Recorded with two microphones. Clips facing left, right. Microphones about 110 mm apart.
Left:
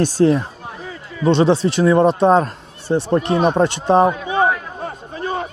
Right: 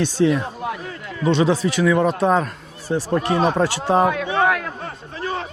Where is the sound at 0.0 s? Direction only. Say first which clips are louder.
Left 3 dB; 40° left (ahead or behind); by 4.1 s 25° left (ahead or behind).